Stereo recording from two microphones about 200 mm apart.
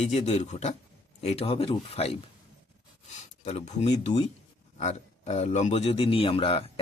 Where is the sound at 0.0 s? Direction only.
35° left (ahead or behind).